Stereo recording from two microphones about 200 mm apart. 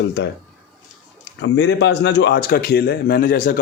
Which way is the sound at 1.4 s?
60° left (ahead or behind).